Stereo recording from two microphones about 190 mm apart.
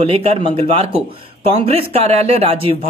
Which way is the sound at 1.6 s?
30° right (ahead or behind).